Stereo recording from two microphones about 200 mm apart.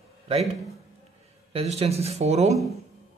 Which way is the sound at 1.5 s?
30° right (ahead or behind).